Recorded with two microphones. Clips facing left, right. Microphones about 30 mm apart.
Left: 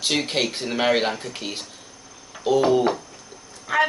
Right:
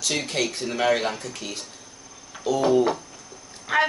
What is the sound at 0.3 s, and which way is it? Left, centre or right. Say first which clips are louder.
Speech: left 2 dB; left.